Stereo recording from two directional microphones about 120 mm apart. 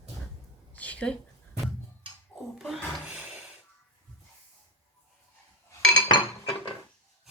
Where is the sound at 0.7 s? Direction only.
10° left (ahead or behind).